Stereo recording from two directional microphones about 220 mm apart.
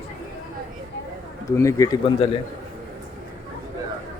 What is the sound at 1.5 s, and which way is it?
Speech, 15° left (ahead or behind).